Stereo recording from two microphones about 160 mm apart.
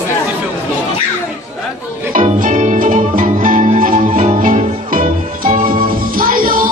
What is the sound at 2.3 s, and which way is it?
Music, 50° right (ahead or behind).